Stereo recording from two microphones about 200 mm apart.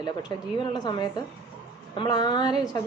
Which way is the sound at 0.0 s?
20° left (ahead or behind).